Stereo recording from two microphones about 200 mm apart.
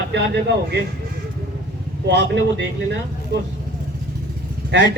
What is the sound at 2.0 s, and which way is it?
Speech, 60° right (ahead or behind).